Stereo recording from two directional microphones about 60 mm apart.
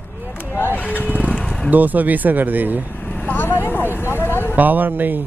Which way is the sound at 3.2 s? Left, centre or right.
Left.